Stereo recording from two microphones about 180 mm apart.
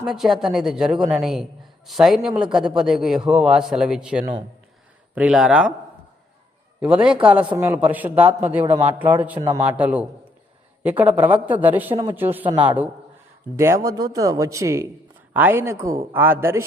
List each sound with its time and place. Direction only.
0.0 s a man's voice: centre (ahead or behind)
6.7 s a man's voice: 5° right (ahead or behind)